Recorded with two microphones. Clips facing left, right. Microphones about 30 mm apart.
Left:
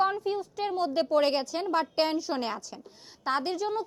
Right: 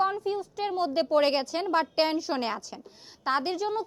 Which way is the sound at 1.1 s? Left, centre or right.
Right.